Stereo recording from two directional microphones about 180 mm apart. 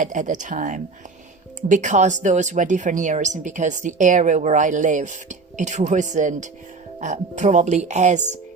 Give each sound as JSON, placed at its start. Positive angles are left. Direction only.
{"t": 0.0, "sound": "a woman's voice", "side_deg": -45}